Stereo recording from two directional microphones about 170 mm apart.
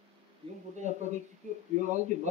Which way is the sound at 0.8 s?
45° right (ahead or behind).